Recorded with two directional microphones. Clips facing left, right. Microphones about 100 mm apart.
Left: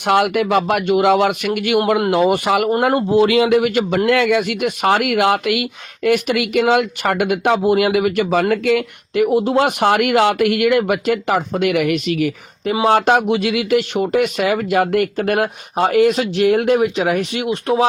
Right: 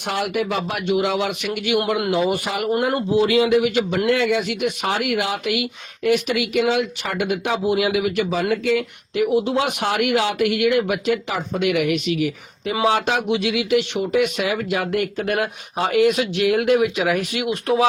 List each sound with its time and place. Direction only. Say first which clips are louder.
0.0 s speech: left 7 dB; 70° left (ahead or behind); by 1.8 s 50° left (ahead or behind)
2.3 s speech: left 7 dB; 75° left (ahead or behind)
2.9 s speech: left 3 dB; 60° left (ahead or behind)
4.1 s speech: left 4 dB; 75° left (ahead or behind)
9.2 s speech: left 4 dB; 45° left (ahead or behind); by 17.8 s 30° left (ahead or behind)